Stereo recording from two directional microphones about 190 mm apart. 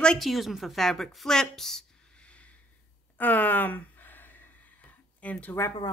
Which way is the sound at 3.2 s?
10° left (ahead or behind).